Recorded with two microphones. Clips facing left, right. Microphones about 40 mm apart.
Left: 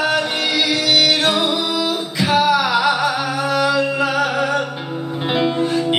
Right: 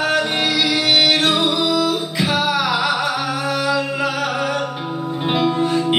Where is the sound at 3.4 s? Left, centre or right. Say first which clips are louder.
Left 5 dB; left.